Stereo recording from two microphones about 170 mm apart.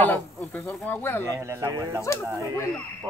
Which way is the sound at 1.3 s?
15° right (ahead or behind).